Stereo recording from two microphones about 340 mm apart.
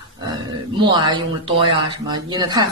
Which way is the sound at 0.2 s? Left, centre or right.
Centre.